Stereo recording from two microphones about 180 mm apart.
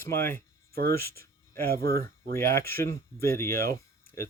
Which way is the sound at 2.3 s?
15° left (ahead or behind).